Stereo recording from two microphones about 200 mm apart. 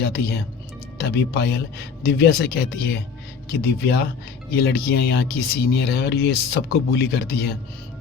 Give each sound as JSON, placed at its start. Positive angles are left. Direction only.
{"t": 0.0, "sound": "speech", "side_deg": 55}